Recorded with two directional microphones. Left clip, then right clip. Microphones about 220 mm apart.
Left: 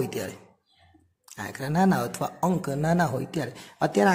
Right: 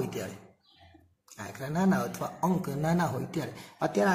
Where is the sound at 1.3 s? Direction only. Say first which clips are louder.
Left 6 dB; 45° left (ahead or behind).